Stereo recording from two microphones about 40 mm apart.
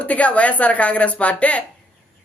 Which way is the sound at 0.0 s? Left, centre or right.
Left.